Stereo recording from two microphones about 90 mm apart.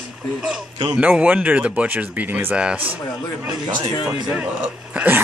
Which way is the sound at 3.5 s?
55° right (ahead or behind).